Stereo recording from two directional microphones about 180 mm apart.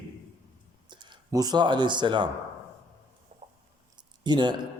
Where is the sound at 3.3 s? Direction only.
35° right (ahead or behind).